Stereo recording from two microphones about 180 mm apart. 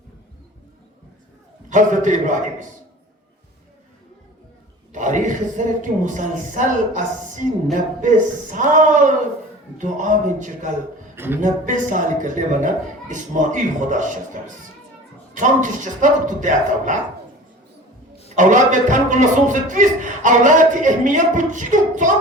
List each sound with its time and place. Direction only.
1.7 s a woman's voice: 45° right (ahead or behind)
4.9 s a woman's voice: 45° right (ahead or behind)
18.3 s a woman's voice: 45° right (ahead or behind)